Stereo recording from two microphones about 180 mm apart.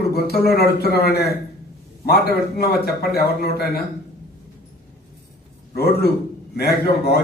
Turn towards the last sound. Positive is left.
turn(degrees=60)  # may be behind; listen again after turning